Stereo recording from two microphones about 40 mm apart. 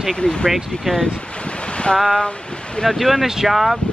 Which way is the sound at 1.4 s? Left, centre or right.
Left.